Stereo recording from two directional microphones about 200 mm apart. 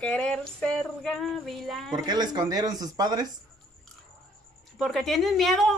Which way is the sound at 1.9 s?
20° right (ahead or behind).